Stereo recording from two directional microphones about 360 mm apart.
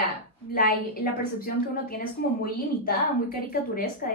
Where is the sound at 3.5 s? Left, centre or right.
Left.